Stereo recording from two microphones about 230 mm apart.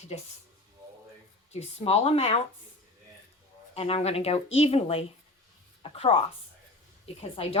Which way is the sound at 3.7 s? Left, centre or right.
Left.